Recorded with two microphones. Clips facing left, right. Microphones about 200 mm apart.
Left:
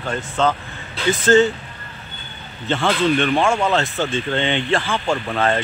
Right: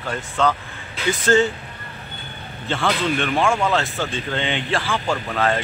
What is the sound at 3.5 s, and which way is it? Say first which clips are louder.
Speech: left 2 dB; 20° left (ahead or behind).